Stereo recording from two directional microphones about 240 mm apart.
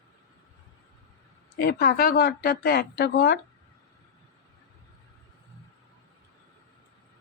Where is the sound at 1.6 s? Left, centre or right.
Left.